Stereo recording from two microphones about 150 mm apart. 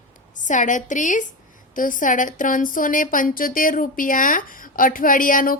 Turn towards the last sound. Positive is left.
turn(degrees=65)  # may be behind; listen again after turning